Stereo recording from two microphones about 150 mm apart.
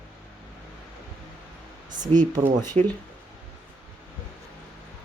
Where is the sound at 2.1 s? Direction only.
40° right (ahead or behind).